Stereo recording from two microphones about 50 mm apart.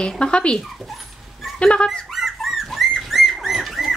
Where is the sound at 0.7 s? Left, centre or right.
Centre.